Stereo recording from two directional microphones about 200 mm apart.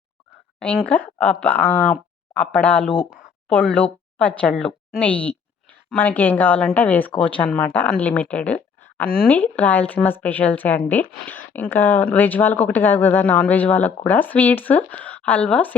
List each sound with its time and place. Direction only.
0.6 s speech: 5° left (ahead or behind)
1.6 s speech: 35° left (ahead or behind)
1.9 s speech: 5° left (ahead or behind)